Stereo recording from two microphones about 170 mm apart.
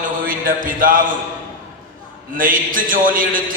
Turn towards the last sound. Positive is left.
turn(degrees=-55)  # may be behind; listen again after turning